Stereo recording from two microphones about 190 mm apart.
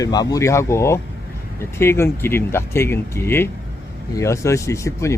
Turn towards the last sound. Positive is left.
turn(degrees=15)  # may be behind; listen again after turning